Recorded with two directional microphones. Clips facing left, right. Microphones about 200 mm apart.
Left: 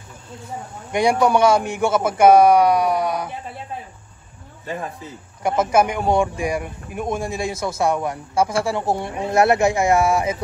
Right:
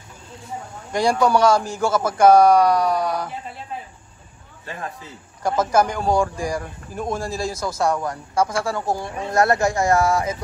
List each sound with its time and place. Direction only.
0.9 s a man's voice: 20° left (ahead or behind)
5.4 s a man's voice: 25° left (ahead or behind)